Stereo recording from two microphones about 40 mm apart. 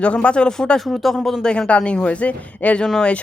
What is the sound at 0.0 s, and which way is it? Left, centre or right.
Speech, left.